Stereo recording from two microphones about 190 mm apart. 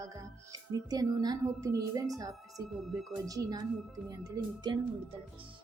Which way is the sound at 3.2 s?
20° right (ahead or behind).